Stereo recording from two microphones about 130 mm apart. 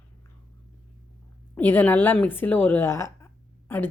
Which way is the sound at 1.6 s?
15° left (ahead or behind).